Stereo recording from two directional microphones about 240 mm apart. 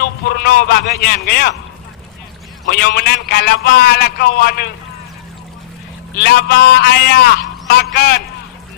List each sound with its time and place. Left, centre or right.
0.0 s a man's voice: left
2.6 s a man's voice: left
6.2 s a man's voice: left